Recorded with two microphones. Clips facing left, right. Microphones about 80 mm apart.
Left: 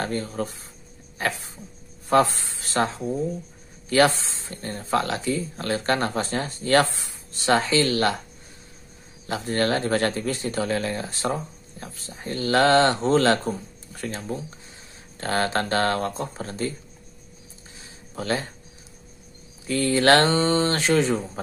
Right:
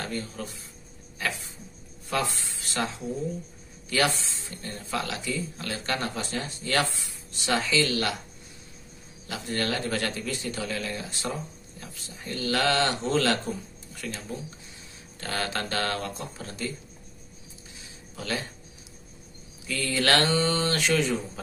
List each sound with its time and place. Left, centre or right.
0.0 s speech: left
9.3 s speech: left
17.7 s a sound: left
19.6 s speech: left